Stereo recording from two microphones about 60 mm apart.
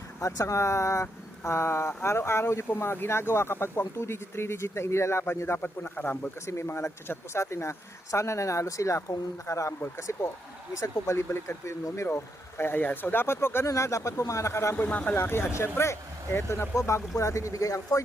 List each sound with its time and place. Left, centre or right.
0.2 s speech: left
1.5 s speech: left
5.6 s speech: left
6.4 s speech: left
10.0 s speech: left
10.8 s speech: left
11.3 s speech: left
12.1 s speech: left
13.7 s speech: left
14.8 s speech: left
15.1 s speech: left
16.7 s speech: left